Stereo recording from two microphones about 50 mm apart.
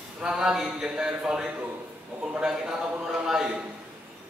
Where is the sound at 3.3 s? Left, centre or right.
Centre.